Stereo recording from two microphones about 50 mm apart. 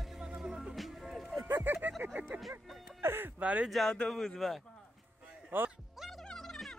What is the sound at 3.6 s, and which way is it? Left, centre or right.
Music, centre.